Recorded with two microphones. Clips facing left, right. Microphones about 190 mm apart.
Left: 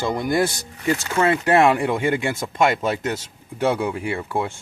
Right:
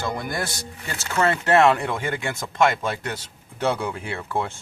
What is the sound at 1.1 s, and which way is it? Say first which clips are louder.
Speech: even; 10° left (ahead or behind).